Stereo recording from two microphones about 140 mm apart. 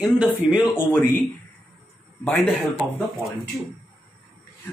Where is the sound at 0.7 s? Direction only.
15° left (ahead or behind).